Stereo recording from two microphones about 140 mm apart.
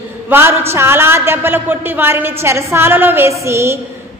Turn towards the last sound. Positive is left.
turn(degrees=-20)  # may be behind; listen again after turning